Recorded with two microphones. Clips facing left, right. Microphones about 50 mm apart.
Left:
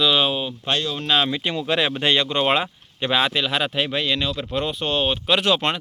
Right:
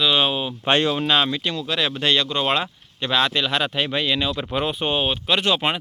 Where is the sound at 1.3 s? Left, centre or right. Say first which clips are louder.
Left 2 dB; left; by 5.0 s centre.